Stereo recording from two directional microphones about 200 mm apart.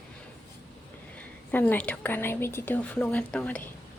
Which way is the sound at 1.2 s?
10° left (ahead or behind).